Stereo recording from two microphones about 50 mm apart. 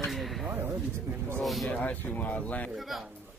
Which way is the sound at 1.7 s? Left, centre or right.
Left.